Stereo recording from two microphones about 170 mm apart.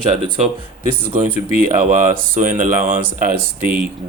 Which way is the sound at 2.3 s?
50° right (ahead or behind).